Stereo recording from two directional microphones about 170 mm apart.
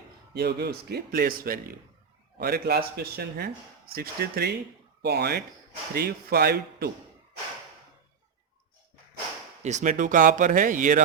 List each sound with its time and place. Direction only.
0.3 s speech: 70° right (ahead or behind)
9.6 s speech: 45° right (ahead or behind)